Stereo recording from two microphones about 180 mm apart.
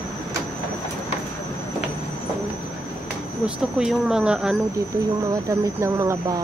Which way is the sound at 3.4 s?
5° right (ahead or behind).